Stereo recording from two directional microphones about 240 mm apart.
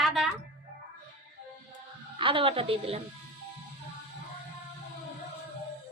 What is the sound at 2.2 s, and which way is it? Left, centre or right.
Speech, right.